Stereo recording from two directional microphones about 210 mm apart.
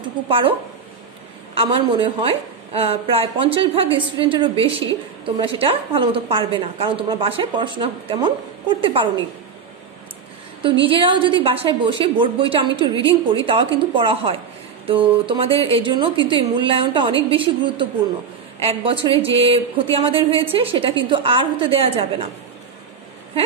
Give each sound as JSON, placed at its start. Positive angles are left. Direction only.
{"t": 0.3, "sound": "a woman's voice", "side_deg": -25}
{"t": 10.6, "sound": "a woman's voice", "side_deg": -25}